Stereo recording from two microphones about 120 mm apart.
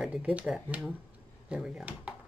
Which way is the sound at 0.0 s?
10° right (ahead or behind).